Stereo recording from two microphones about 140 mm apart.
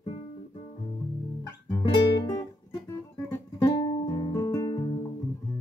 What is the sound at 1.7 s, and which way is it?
Music, 30° left (ahead or behind).